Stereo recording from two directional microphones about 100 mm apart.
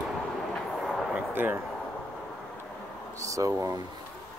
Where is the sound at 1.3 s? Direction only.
20° right (ahead or behind).